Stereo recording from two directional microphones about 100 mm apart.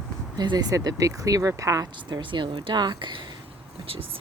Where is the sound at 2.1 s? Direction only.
50° right (ahead or behind).